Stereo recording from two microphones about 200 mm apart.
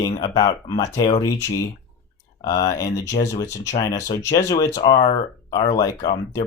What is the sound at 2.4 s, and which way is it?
Speech, 20° left (ahead or behind).